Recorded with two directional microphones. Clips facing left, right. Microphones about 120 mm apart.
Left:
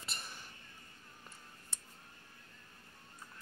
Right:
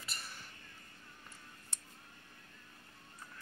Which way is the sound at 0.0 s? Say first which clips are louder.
Left 1 dB; 20° left (ahead or behind).